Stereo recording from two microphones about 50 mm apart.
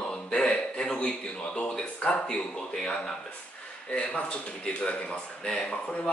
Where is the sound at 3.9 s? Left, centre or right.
Left.